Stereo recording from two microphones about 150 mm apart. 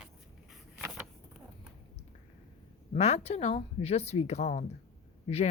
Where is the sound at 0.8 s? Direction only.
10° right (ahead or behind).